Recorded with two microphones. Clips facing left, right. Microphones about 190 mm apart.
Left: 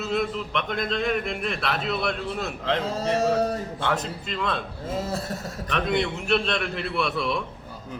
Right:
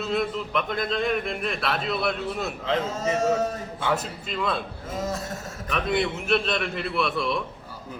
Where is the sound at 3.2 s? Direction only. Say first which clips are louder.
Left 1 dB; 35° left (ahead or behind).